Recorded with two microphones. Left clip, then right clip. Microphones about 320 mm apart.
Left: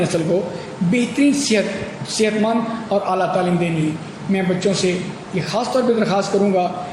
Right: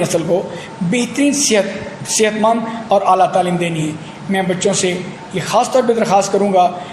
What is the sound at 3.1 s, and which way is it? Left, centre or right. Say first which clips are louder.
A man's voice: right 6 dB; right.